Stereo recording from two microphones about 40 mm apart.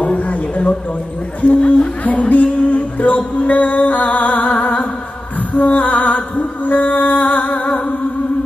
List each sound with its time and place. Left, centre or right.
0.0 s a sound: left
1.4 s speech: left
2.0 s music: left